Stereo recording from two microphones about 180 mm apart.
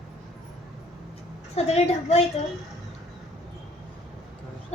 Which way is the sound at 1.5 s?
35° left (ahead or behind).